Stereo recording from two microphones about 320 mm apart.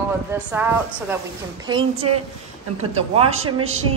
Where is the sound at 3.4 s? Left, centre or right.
Right.